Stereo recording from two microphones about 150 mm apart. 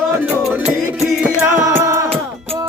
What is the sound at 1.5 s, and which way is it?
Music, 20° right (ahead or behind).